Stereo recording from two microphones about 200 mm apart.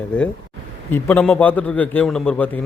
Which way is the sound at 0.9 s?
10° left (ahead or behind).